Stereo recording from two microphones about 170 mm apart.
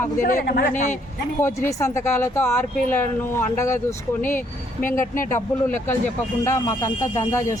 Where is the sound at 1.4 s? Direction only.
15° left (ahead or behind).